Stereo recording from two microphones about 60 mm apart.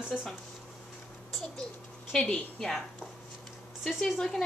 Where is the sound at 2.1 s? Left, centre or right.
Centre.